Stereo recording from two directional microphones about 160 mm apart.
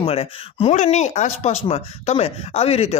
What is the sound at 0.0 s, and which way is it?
Speech, 40° left (ahead or behind).